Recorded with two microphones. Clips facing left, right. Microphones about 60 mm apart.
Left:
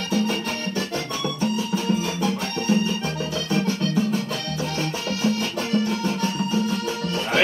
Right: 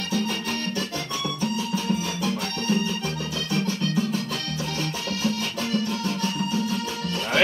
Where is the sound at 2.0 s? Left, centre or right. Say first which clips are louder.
Left 3 dB; left.